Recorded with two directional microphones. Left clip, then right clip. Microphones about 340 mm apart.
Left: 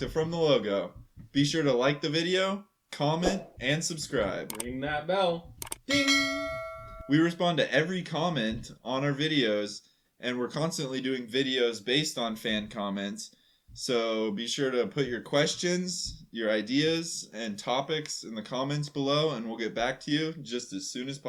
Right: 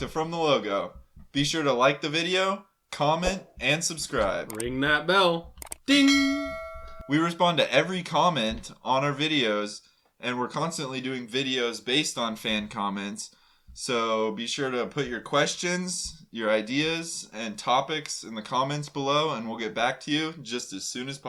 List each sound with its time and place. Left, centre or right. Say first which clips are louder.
0.0 s speech: right 1 dB; centre
4.8 s speech: right 7 dB; right
5.9 s clang: right 4 dB; centre
7.1 s speech: right 3 dB; centre